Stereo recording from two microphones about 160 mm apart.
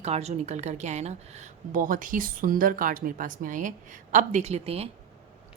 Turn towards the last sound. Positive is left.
turn(degrees=-40)  # may be behind; listen again after turning